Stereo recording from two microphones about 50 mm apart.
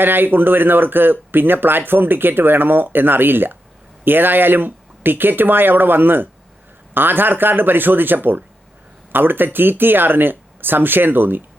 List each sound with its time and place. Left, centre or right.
0.0 s speech: right